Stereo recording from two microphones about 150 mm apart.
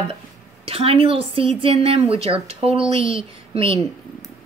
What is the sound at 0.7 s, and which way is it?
A woman's voice, 40° right (ahead or behind).